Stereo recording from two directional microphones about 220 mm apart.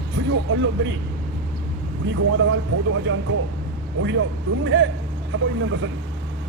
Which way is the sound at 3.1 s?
60° right (ahead or behind).